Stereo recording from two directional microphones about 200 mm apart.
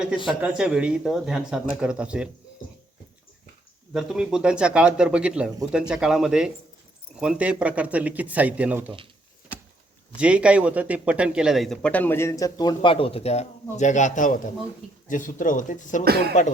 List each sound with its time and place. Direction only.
0.4 s speech: 5° right (ahead or behind)
3.9 s speech: centre (ahead or behind)
10.2 s speech: 5° right (ahead or behind); by 16.0 s 40° left (ahead or behind)
16.0 s speech: 50° right (ahead or behind)